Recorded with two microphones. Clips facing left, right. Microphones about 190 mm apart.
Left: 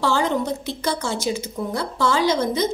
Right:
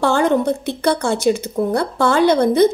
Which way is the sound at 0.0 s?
55° right (ahead or behind).